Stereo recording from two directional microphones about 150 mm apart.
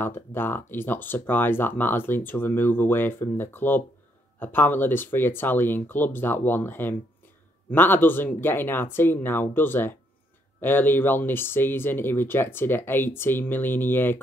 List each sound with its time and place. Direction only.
0.0 s speech: 15° left (ahead or behind)